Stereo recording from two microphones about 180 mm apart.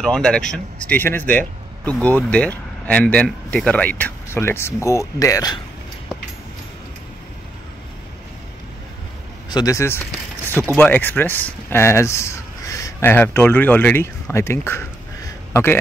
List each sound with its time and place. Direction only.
0.0 s speech: 5° left (ahead or behind); by 5.6 s 20° left (ahead or behind)
9.5 s speech: 20° left (ahead or behind)